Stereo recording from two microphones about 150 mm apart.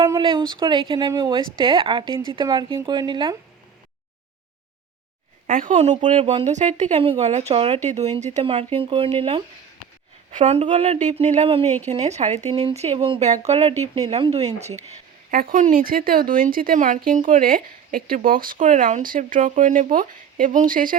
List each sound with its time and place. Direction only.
0.2 s a woman's voice: 35° right (ahead or behind)
5.5 s speech: 65° right (ahead or behind)
6.1 s a woman's voice: 45° right (ahead or behind)
10.3 s speech: 50° right (ahead or behind)
15.3 s speech: 75° right (ahead or behind)